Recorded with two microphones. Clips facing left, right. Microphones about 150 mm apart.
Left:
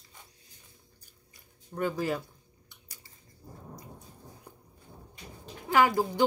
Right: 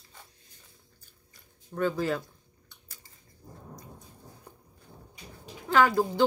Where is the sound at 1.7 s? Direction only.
10° left (ahead or behind).